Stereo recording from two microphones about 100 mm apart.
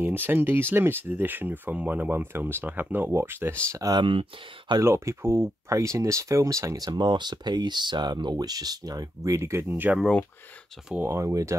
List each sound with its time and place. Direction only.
0.0 s speech: 20° right (ahead or behind)
3.7 s speech: 40° right (ahead or behind)
4.0 s speech: 60° right (ahead or behind)
4.8 s speech: 25° right (ahead or behind)
11.0 s speech: 25° right (ahead or behind)